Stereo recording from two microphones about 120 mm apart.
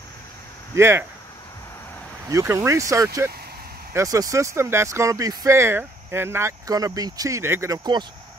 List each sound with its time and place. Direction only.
0.7 s speech: 20° right (ahead or behind)
2.2 s speech: 25° right (ahead or behind)